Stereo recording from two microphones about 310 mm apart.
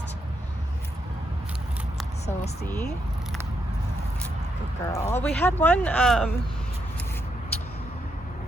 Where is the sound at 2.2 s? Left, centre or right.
Left.